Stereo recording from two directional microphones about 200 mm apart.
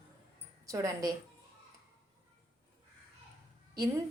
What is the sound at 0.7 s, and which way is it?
Speech, 15° right (ahead or behind).